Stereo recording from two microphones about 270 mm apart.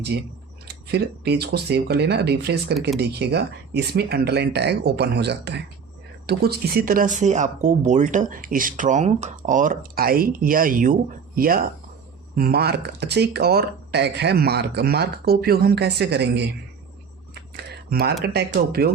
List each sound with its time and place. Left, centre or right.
0.1 s speech: right
17.6 s typing: right
18.2 s speech: right